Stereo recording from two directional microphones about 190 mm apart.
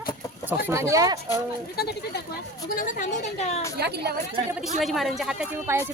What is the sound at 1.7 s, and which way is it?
Speech, 55° left (ahead or behind).